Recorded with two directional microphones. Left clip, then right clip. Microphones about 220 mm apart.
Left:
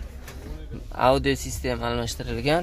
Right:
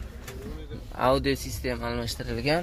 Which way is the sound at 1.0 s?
10° left (ahead or behind).